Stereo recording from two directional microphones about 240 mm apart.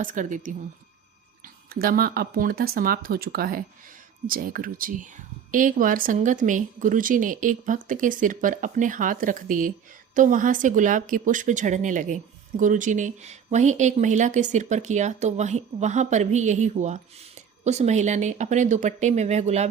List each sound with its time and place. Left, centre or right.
0.0 s a woman's voice: right
1.7 s a woman's voice: right